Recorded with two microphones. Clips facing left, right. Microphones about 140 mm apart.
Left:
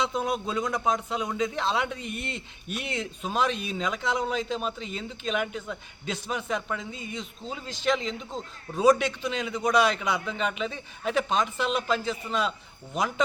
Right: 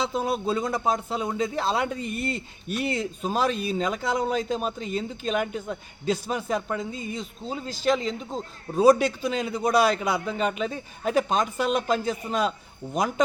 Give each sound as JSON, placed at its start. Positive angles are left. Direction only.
{"t": 0.4, "sound": "a man's voice", "side_deg": -35}